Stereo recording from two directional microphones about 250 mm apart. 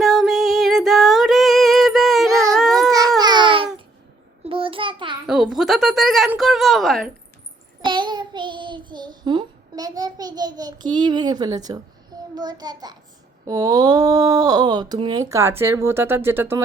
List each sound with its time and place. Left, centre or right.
0.0 s music: centre
3.2 s babbling: centre
4.4 s a sound: right
5.2 s speech: centre
7.9 s child singing: centre
12.3 s speech: centre